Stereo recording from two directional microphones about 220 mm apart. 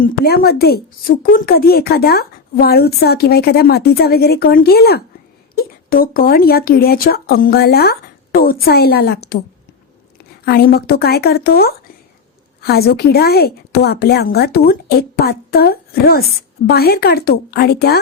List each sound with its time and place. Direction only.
0.0 s a woman's voice: 45° left (ahead or behind)
10.4 s a woman's voice: 45° left (ahead or behind)